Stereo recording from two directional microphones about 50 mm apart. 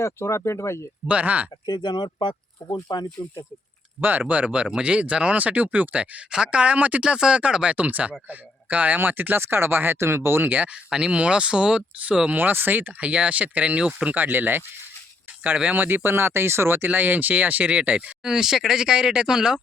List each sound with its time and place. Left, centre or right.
0.0 s speech: left
1.0 s speech: right
2.6 s speech: left
4.0 s speech: right
7.0 s a man's voice: centre; by 10.5 s right
10.5 s speech: right
10.8 s speech: centre
12.4 s speech: right
14.2 s speech: right
15.7 s speech: right
16.0 s speech: right
16.9 s speech: right
18.3 s speech: centre